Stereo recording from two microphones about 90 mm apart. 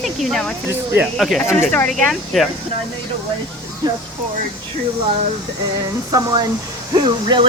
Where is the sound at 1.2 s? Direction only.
Centre (ahead or behind).